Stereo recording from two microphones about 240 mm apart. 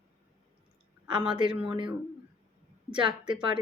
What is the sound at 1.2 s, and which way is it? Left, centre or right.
Speech, centre.